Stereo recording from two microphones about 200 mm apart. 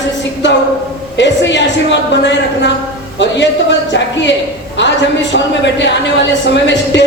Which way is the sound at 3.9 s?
60° left (ahead or behind).